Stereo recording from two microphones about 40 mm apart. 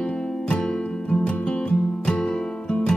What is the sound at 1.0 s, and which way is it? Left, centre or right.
Music, left.